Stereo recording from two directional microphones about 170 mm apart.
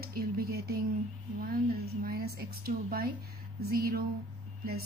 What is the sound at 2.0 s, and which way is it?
A woman's voice, 60° right (ahead or behind).